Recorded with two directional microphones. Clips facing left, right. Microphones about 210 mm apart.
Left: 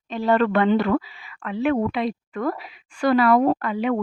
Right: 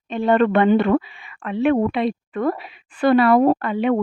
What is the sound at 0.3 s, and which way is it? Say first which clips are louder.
A woman's voice: right 3 dB; 25° right (ahead or behind).